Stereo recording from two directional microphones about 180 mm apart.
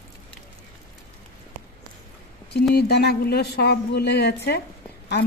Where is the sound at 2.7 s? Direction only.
65° left (ahead or behind).